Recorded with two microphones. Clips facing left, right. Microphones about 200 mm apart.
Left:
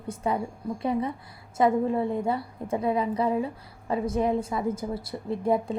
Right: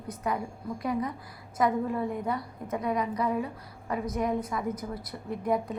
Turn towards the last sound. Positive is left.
turn(degrees=30)  # may be behind; listen again after turning